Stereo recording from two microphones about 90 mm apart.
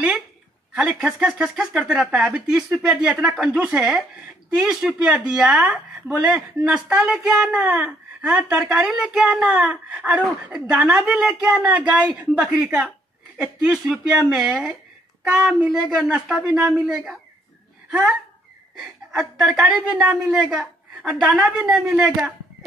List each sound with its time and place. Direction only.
0.7 s speech: 10° right (ahead or behind)
18.8 s speech: 5° right (ahead or behind)